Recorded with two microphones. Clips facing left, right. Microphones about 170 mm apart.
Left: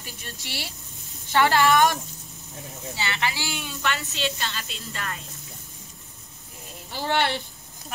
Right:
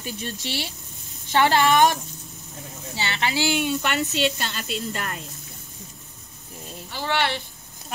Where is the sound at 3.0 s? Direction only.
25° right (ahead or behind).